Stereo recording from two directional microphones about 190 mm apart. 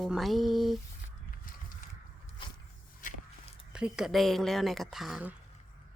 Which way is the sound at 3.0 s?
45° left (ahead or behind).